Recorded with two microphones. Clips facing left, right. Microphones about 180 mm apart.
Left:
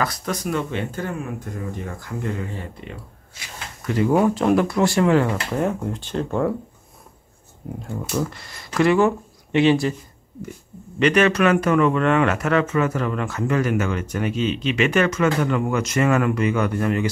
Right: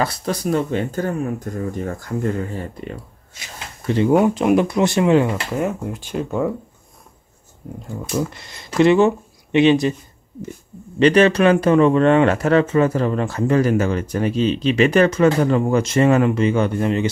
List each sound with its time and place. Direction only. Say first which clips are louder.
0.0 s speech: right 3 dB; 30° right (ahead or behind)
3.3 s a sound: right 1 dB; 25° right (ahead or behind)
4.2 s speech: right 2 dB; 15° right (ahead or behind)
5.3 s speech: right 1 dB; 5° right (ahead or behind)
8.1 s speech: right 3 dB; 15° right (ahead or behind)
11.0 s speech: right 4 dB; 30° right (ahead or behind)